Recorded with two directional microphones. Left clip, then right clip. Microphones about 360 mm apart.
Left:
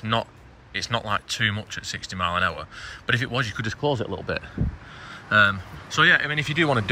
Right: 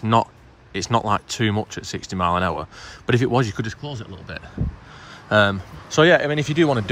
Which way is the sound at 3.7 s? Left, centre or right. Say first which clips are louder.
Left 8 dB; centre.